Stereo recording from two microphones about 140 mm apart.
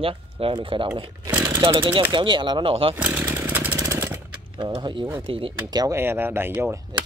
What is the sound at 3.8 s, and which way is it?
Jackhammer, 20° right (ahead or behind).